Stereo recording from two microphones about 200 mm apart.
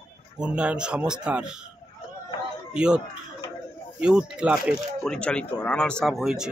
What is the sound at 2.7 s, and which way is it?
Speech, 5° right (ahead or behind).